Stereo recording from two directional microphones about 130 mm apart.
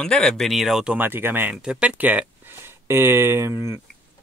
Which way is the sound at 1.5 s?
5° right (ahead or behind).